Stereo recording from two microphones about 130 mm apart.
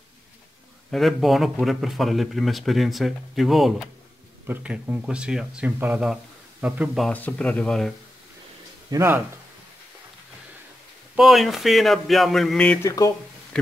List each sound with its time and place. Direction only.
0.9 s speech: centre (ahead or behind)
4.5 s speech: 15° right (ahead or behind)
7.1 s speech: 10° left (ahead or behind)
8.9 s speech: 15° right (ahead or behind)
11.1 s speech: centre (ahead or behind)
12.8 s speech: 25° left (ahead or behind)